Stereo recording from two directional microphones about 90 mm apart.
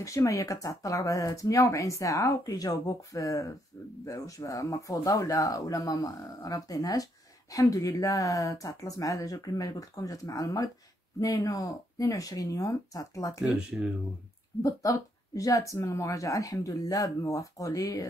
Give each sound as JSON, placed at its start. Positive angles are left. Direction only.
{"t": 0.0, "sound": "speech", "side_deg": 35}
{"t": 13.4, "sound": "speech", "side_deg": -5}
{"t": 14.6, "sound": "speech", "side_deg": 40}